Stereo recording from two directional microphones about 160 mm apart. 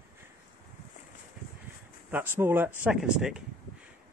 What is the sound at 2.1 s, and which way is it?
Speech, 10° right (ahead or behind).